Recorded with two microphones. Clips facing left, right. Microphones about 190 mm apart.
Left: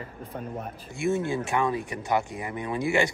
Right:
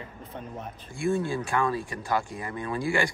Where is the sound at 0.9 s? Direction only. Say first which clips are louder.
Left 1 dB; 20° left (ahead or behind).